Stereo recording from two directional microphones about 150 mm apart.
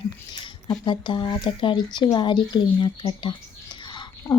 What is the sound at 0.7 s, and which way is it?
A woman's voice, 30° left (ahead or behind).